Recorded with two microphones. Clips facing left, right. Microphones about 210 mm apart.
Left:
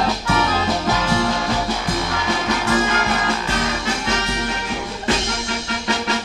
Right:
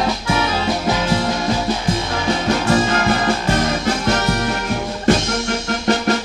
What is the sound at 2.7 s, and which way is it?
Music, 35° right (ahead or behind).